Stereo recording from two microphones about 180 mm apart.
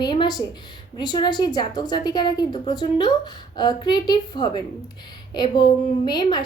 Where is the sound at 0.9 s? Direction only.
25° left (ahead or behind).